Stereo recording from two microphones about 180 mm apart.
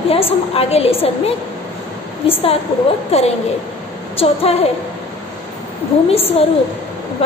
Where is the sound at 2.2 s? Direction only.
30° left (ahead or behind).